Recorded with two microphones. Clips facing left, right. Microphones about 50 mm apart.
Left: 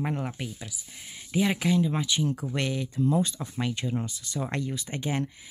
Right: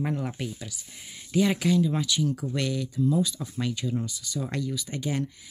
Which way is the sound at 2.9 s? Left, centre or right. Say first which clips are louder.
Even; left.